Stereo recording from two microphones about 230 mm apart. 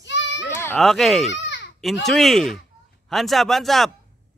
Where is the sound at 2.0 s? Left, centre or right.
Centre.